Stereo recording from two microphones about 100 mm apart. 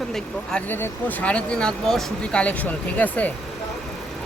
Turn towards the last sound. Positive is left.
turn(degrees=15)  # may be behind; listen again after turning